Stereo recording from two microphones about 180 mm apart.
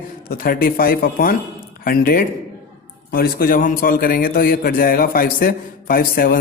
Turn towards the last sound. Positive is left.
turn(degrees=55)  # may be behind; listen again after turning